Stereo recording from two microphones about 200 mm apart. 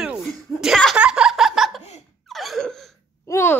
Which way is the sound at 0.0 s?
Centre (ahead or behind).